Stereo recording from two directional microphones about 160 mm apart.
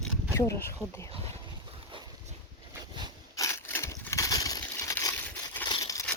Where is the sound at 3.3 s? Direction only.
20° left (ahead or behind).